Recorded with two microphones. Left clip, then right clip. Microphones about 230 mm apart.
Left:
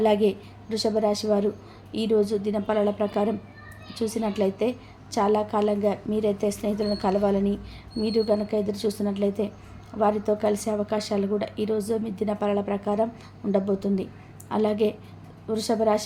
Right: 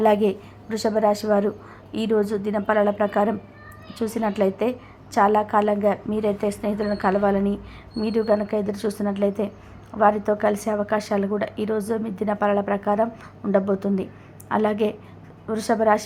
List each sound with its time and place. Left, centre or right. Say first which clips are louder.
0.0 s a woman's voice: right 3 dB; centre